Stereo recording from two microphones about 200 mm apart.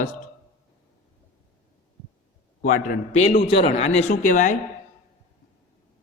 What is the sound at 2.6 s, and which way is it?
Speech, 40° left (ahead or behind).